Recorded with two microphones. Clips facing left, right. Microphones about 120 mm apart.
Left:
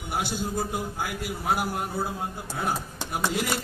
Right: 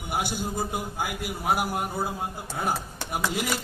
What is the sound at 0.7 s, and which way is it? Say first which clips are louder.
A man's voice: even; 5° right (ahead or behind).